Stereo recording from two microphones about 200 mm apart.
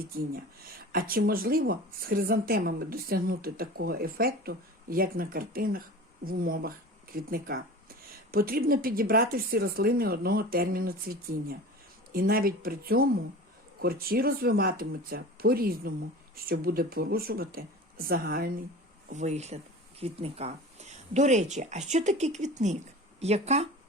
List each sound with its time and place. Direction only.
0.0 s speech: 45° right (ahead or behind)
19.0 s speech: 35° right (ahead or behind)